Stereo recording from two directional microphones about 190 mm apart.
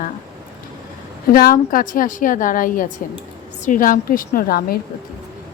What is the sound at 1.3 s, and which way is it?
Speech, 50° left (ahead or behind).